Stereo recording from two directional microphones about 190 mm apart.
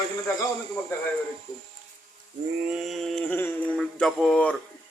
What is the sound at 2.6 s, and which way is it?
Mantra, 5° right (ahead or behind).